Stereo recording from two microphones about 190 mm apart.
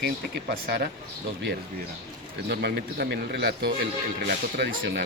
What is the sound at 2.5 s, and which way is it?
Speech, 55° right (ahead or behind).